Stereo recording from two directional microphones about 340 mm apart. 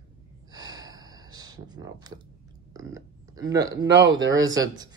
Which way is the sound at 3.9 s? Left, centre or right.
Right.